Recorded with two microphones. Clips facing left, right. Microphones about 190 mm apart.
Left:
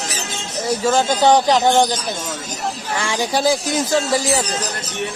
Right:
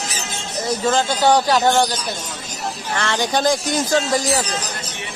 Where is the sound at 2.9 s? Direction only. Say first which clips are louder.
Even; 10° left (ahead or behind).